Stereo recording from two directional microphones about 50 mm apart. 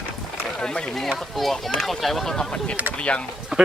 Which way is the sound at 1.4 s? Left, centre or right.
Centre.